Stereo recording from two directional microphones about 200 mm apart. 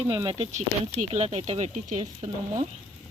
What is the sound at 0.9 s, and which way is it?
Speech, 35° right (ahead or behind).